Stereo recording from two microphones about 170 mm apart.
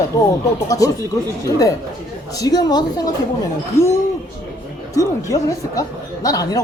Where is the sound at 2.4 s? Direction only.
20° left (ahead or behind).